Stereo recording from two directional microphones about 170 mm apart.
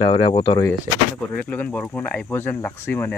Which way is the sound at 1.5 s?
10° left (ahead or behind).